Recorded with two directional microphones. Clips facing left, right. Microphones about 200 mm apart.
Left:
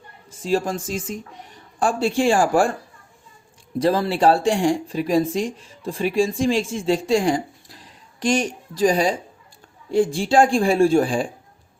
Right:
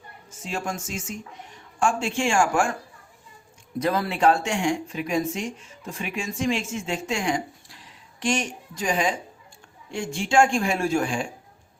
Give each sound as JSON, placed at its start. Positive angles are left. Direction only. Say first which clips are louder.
{"t": 0.3, "sound": "speech", "louder": "left 9 dB", "side_deg": 35}
{"t": 3.8, "sound": "speech", "louder": "left 5 dB", "side_deg": 30}